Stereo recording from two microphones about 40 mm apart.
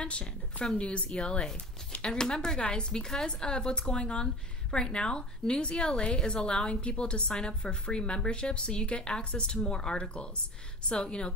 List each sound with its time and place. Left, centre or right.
0.0 s a woman's voice: left